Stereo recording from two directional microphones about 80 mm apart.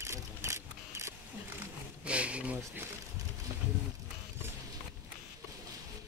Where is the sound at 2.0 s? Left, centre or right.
Centre.